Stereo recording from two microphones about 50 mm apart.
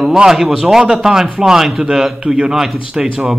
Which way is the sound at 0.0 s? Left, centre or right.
Centre.